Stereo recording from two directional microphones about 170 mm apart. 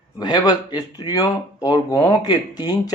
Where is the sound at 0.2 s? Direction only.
25° left (ahead or behind).